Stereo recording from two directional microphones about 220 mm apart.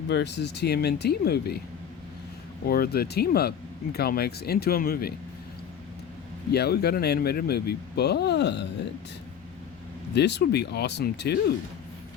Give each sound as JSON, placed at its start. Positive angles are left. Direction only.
{"t": 0.1, "sound": "speech", "side_deg": 50}
{"t": 2.6, "sound": "speech", "side_deg": 45}
{"t": 6.5, "sound": "speech", "side_deg": 45}
{"t": 10.2, "sound": "speech", "side_deg": 50}